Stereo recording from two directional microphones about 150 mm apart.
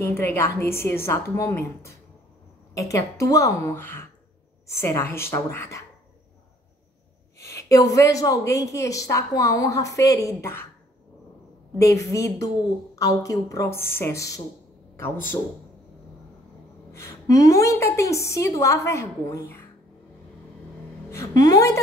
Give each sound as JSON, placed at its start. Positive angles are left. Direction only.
{"t": 0.0, "sound": "a woman's voice", "side_deg": 15}
{"t": 7.3, "sound": "a woman's voice", "side_deg": 20}
{"t": 11.8, "sound": "a woman's voice", "side_deg": 20}
{"t": 16.9, "sound": "a woman's voice", "side_deg": 20}
{"t": 21.1, "sound": "a woman's voice", "side_deg": 20}